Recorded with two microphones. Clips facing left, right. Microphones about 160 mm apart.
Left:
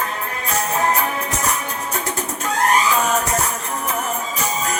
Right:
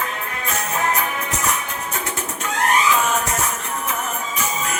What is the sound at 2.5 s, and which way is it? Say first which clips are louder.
Music: left 1 dB; 35° left (ahead or behind).